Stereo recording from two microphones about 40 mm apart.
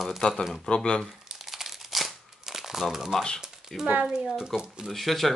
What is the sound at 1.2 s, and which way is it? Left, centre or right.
Crumpling, centre.